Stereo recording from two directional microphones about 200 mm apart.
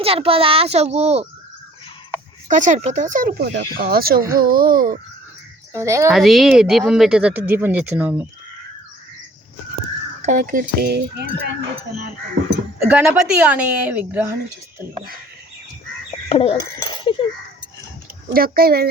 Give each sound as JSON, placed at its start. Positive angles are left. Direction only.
{"t": 0.0, "sound": "a child's voice", "side_deg": -30}
{"t": 2.5, "sound": "speech", "side_deg": -40}
{"t": 5.7, "sound": "a woman's voice", "side_deg": -15}
{"t": 6.1, "sound": "speech", "side_deg": 0}
{"t": 10.2, "sound": "speech", "side_deg": -35}
{"t": 12.9, "sound": "a woman's voice", "side_deg": -5}
{"t": 16.3, "sound": "a sound", "side_deg": 30}
{"t": 16.6, "sound": "speech", "side_deg": 20}
{"t": 18.3, "sound": "speech", "side_deg": -50}